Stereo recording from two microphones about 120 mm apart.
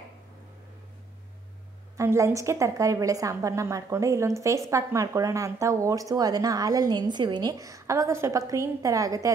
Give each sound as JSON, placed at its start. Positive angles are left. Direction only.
{"t": 2.0, "sound": "a woman's voice", "side_deg": -25}